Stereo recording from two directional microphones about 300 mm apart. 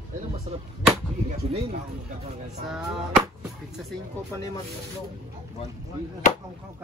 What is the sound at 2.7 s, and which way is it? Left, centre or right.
Speech, centre.